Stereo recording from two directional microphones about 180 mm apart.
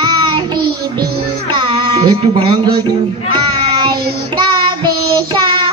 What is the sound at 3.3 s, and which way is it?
Child singing, 25° right (ahead or behind).